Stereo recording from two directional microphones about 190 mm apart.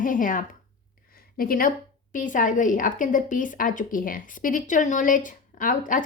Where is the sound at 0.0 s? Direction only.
45° left (ahead or behind).